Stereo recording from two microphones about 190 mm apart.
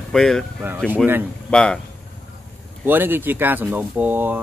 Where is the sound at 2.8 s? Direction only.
10° right (ahead or behind).